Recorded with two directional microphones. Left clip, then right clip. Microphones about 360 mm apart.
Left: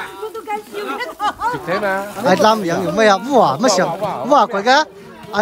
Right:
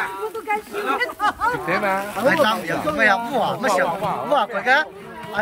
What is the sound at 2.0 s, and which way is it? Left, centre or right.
A man's voice, centre.